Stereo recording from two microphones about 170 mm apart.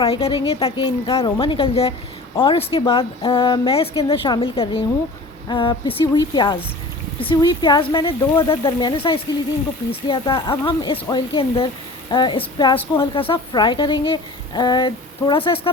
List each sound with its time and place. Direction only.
0.0 s a woman's voice: 30° left (ahead or behind)